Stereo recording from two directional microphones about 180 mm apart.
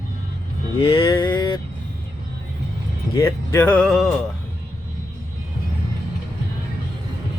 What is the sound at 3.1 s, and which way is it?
Speech, 15° left (ahead or behind).